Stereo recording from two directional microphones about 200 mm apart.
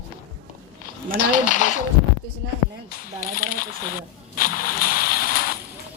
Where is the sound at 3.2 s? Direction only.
45° left (ahead or behind).